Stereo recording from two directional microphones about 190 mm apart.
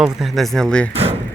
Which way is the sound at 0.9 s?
30° right (ahead or behind).